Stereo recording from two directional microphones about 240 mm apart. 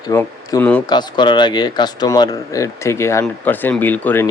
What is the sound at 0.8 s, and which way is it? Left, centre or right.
Speech, centre.